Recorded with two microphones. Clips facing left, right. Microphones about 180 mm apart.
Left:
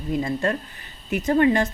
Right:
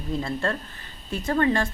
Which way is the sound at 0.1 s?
15° left (ahead or behind).